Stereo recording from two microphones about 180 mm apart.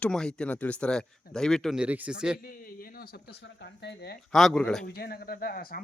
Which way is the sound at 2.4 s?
55° left (ahead or behind).